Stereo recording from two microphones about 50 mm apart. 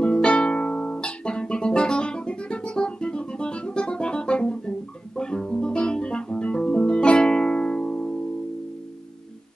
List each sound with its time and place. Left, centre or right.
0.0 s music: centre